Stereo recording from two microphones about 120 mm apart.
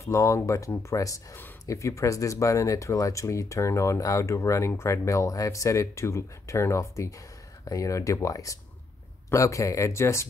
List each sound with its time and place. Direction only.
0.0 s speech: 25° left (ahead or behind)